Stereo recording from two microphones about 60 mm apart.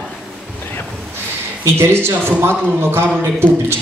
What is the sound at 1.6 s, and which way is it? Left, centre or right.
A woman's voice, right.